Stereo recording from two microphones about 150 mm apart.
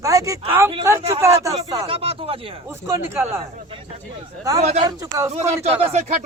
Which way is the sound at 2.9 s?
15° right (ahead or behind).